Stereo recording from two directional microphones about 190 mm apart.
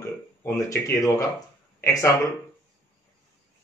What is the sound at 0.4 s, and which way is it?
Speech, 15° left (ahead or behind).